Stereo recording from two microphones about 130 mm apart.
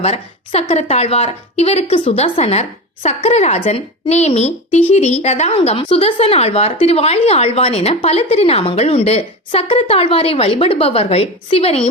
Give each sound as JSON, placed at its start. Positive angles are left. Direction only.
{"t": 0.0, "sound": "speech", "side_deg": 50}